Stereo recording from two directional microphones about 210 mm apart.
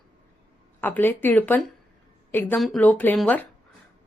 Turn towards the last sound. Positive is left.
turn(degrees=5)  # may be behind; listen again after turning